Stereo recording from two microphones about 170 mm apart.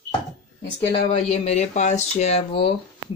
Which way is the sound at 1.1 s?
35° left (ahead or behind).